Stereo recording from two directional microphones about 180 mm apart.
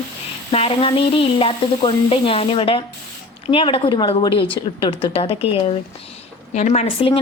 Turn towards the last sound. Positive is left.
turn(degrees=30)  # may be behind; listen again after turning